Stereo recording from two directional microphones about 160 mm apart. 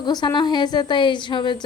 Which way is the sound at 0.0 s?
25° left (ahead or behind).